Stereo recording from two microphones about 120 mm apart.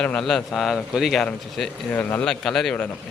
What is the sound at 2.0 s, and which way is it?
Speech, 15° left (ahead or behind).